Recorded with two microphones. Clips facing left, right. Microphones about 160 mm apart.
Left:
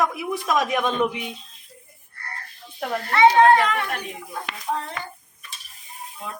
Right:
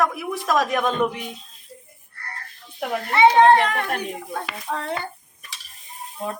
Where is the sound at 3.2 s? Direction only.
25° right (ahead or behind).